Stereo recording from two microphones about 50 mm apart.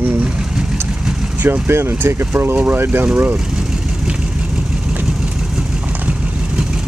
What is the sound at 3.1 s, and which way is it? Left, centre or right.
Speech, right.